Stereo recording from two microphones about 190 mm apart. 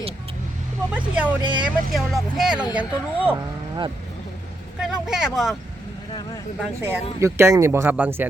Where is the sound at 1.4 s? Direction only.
25° right (ahead or behind).